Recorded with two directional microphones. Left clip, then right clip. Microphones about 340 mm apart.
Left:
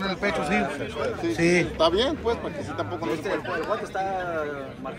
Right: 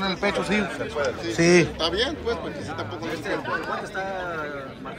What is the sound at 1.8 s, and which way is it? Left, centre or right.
A man's voice, centre.